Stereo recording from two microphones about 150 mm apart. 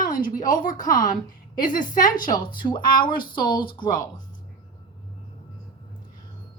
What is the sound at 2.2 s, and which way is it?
Speech, 30° left (ahead or behind).